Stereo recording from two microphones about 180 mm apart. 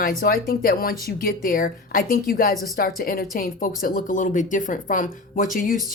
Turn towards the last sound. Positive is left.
turn(degrees=50)  # may be behind; listen again after turning